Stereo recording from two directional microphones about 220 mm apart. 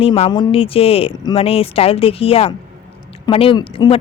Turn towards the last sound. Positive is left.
turn(degrees=20)  # may be behind; listen again after turning